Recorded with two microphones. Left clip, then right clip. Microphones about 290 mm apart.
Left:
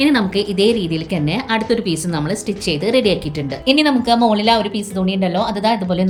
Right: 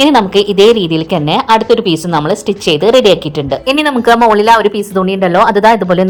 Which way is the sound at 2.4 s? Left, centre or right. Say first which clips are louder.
Right 10 dB; centre.